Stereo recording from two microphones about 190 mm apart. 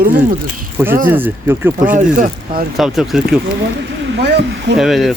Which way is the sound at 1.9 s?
40° right (ahead or behind).